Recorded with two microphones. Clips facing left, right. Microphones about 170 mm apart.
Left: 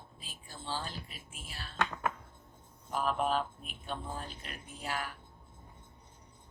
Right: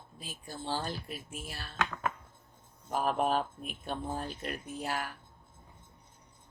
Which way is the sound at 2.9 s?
45° right (ahead or behind).